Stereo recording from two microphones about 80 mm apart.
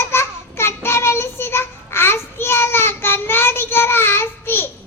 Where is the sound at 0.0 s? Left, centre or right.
Left.